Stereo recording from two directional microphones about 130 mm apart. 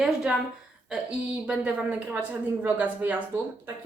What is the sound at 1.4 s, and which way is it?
A woman's voice, 10° right (ahead or behind).